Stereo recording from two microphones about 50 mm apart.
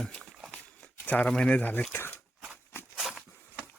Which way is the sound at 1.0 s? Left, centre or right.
Left.